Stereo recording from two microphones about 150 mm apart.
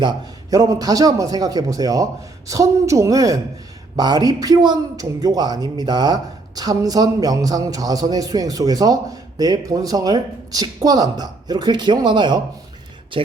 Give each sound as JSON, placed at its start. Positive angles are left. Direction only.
{"t": 0.5, "sound": "a man's voice", "side_deg": -25}